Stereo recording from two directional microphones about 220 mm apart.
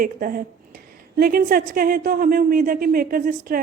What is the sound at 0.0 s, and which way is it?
A woman's voice, 40° right (ahead or behind).